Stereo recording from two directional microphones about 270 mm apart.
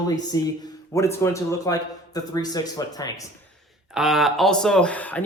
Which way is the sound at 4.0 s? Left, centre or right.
Centre.